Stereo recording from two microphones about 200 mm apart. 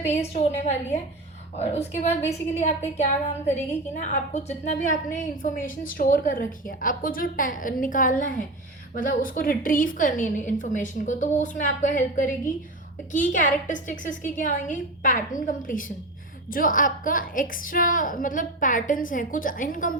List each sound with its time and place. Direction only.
0.3 s a woman's voice: 35° left (ahead or behind)